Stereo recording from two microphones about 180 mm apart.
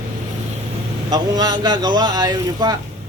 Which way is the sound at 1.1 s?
20° right (ahead or behind).